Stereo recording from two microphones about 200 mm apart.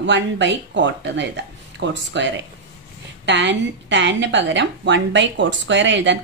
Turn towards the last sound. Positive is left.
turn(degrees=-65)  # may be behind; listen again after turning